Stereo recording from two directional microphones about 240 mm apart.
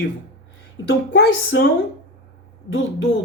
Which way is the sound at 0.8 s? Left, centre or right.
Left.